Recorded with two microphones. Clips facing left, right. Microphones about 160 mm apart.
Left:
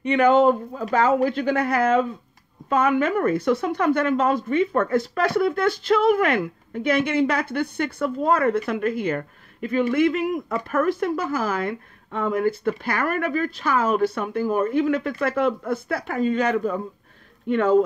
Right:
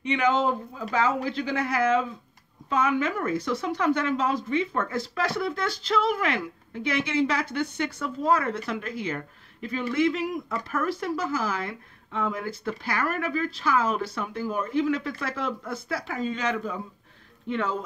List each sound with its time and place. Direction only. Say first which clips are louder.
0.0 s speech: left 7 dB; 55° left (ahead or behind)